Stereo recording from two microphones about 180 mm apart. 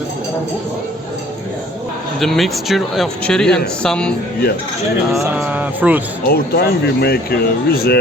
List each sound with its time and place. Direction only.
2.2 s speech: centre (ahead or behind)
5.1 s speech: 5° right (ahead or behind)
6.2 s speech: 60° left (ahead or behind)